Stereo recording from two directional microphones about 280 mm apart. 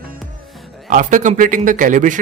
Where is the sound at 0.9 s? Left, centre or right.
Right.